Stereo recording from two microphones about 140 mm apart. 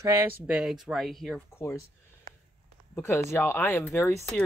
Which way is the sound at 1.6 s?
20° left (ahead or behind).